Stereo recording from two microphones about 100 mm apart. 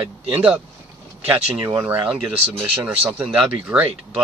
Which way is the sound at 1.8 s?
15° right (ahead or behind).